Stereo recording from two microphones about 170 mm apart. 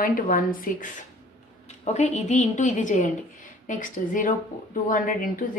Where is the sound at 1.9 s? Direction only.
40° left (ahead or behind).